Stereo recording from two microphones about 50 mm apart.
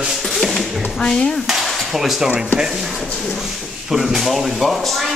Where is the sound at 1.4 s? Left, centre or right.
Centre.